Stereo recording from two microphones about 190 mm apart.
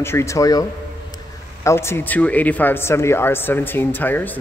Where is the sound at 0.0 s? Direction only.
15° left (ahead or behind).